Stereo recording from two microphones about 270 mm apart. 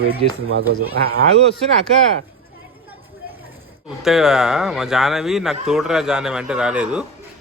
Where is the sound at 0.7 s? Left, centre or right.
Right.